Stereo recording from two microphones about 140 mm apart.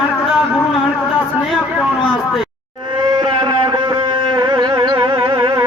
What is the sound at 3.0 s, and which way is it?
Music, 30° right (ahead or behind).